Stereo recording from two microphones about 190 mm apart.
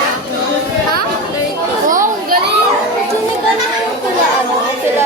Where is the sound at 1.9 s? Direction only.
45° right (ahead or behind).